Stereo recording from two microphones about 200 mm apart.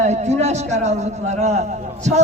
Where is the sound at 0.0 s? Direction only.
35° right (ahead or behind).